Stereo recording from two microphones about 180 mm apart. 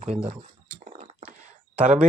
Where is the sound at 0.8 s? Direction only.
45° right (ahead or behind).